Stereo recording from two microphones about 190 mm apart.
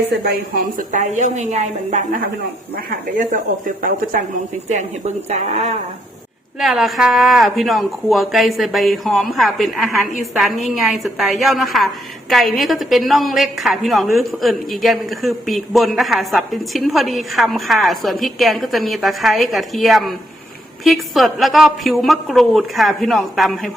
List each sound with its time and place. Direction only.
0.1 s a woman's voice: 50° right (ahead or behind); by 5.7 s 35° right (ahead or behind)
6.6 s a woman's voice: centre (ahead or behind)